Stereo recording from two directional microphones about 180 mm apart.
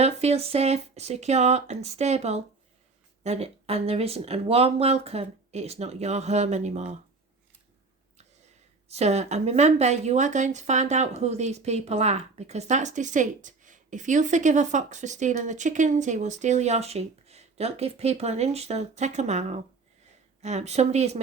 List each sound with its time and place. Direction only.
0.0 s speech: 35° right (ahead or behind)
8.9 s speech: 35° right (ahead or behind)